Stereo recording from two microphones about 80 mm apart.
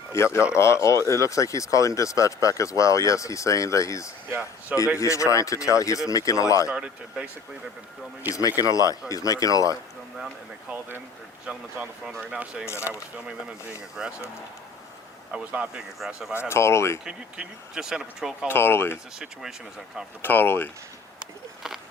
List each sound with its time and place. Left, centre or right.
0.1 s speech: left
6.7 s speech: centre
8.4 s speech: left
11.4 s speech: centre
12.6 s speech: left
14.0 s speech: centre
15.3 s speech: centre
16.3 s speech: left
17.1 s speech: centre
18.4 s speech: left
19.2 s speech: centre
20.2 s speech: left